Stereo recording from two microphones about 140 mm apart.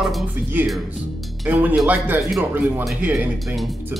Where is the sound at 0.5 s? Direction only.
15° right (ahead or behind).